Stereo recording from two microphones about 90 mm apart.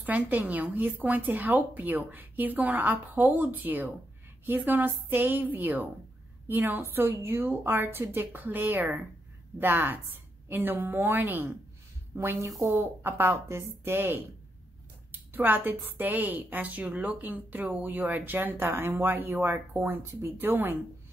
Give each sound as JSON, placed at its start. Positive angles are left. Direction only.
{"t": 0.0, "sound": "a woman's voice", "side_deg": -20}
{"t": 12.7, "sound": "a woman's voice", "side_deg": -25}
{"t": 15.3, "sound": "a woman's voice", "side_deg": -20}